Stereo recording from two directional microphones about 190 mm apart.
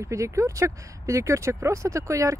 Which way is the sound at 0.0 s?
15° right (ahead or behind).